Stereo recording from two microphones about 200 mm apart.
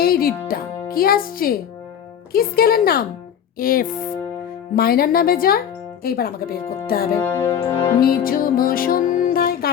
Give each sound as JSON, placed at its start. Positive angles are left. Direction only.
{"t": 0.0, "sound": "speech", "side_deg": 50}
{"t": 7.5, "sound": "music", "side_deg": 25}
{"t": 8.0, "sound": "music", "side_deg": 45}